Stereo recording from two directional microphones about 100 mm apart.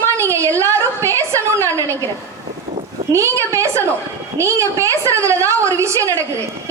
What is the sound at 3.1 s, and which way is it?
A woman's voice, 30° right (ahead or behind).